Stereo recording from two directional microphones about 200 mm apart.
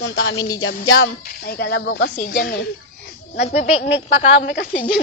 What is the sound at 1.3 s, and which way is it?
Speech, 50° left (ahead or behind).